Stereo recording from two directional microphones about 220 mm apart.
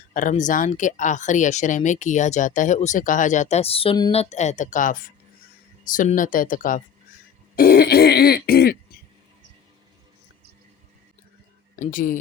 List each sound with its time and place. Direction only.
0.1 s speech: 35° left (ahead or behind)
7.5 s throat clearing: 40° left (ahead or behind)
11.8 s speech: 35° left (ahead or behind)